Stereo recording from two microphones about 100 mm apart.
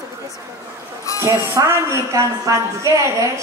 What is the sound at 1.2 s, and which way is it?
A woman's voice, 25° right (ahead or behind).